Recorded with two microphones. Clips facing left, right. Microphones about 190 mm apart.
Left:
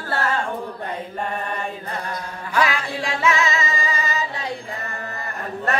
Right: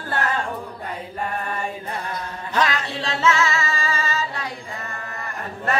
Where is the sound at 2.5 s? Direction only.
10° left (ahead or behind).